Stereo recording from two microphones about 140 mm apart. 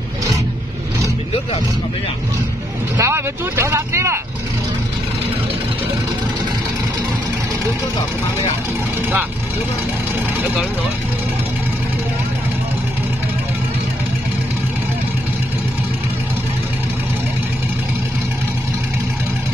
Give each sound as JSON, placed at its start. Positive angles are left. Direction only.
{"t": 3.0, "sound": "speech", "side_deg": -20}